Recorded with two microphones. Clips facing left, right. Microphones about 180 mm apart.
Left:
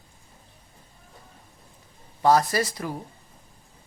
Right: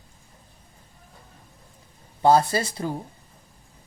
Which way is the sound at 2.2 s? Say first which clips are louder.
Right 2 dB; 30° right (ahead or behind).